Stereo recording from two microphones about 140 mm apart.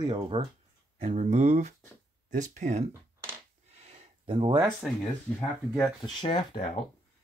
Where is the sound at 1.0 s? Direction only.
50° right (ahead or behind).